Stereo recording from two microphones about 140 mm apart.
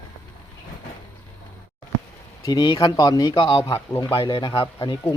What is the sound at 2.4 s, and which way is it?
Speech, 30° left (ahead or behind).